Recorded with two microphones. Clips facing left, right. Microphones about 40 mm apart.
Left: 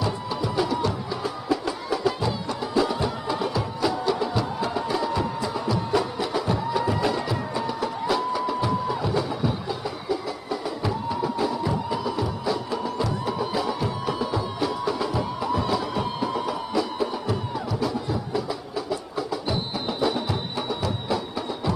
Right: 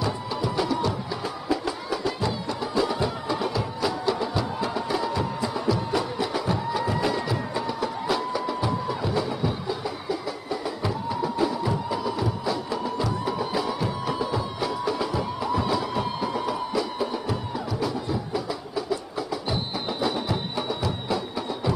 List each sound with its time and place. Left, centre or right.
0.0 s music: centre